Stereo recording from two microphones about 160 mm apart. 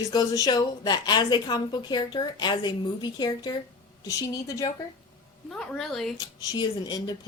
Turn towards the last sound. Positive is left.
turn(degrees=25)  # may be behind; listen again after turning